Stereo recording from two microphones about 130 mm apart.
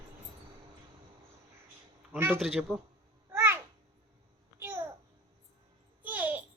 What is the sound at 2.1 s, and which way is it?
Speech, 15° right (ahead or behind).